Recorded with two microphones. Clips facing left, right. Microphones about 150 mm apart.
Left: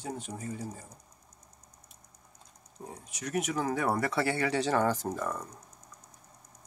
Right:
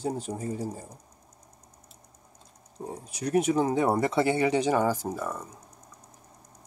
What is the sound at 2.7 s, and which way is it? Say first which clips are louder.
Speech: right 7 dB; 30° right (ahead or behind).